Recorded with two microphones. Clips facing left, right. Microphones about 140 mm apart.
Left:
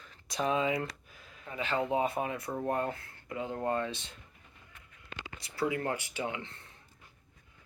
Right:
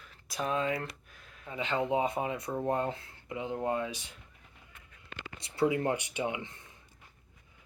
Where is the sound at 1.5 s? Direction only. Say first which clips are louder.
Right 1 dB; 20° right (ahead or behind).